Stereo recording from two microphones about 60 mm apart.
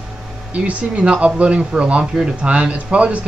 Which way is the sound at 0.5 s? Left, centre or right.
Right.